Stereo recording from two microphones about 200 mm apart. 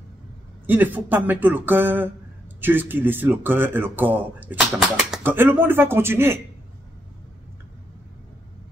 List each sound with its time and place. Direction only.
0.7 s a man's voice: 10° right (ahead or behind)